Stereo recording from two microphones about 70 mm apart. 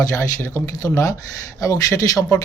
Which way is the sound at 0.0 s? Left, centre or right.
Left.